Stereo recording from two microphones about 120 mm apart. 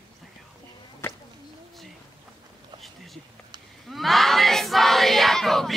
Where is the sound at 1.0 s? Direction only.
20° left (ahead or behind).